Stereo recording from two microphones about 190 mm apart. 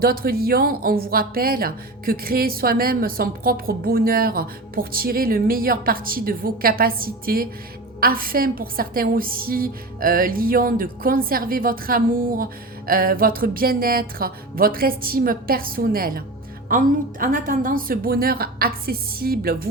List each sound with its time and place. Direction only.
0.0 s speech: 50° right (ahead or behind)